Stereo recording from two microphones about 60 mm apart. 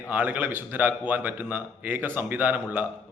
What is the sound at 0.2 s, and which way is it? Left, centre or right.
A man's voice, right.